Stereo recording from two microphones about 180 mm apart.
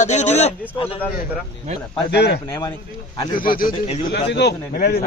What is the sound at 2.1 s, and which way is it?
Speech, 70° left (ahead or behind).